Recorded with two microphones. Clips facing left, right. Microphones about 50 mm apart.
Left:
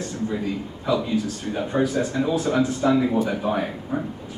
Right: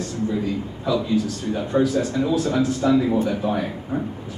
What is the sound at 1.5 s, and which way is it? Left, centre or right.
A man's voice, centre.